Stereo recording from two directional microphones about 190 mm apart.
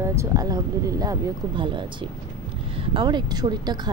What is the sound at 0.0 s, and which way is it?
Speech, 15° right (ahead or behind).